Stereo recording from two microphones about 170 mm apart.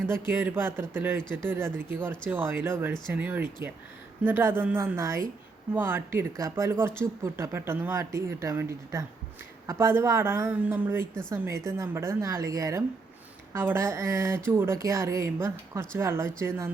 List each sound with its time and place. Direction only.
0.1 s speech: 15° right (ahead or behind)